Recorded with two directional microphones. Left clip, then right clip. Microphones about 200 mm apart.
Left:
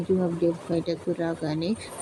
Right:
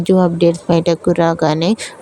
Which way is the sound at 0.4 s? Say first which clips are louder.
Right 13 dB; 50° right (ahead or behind).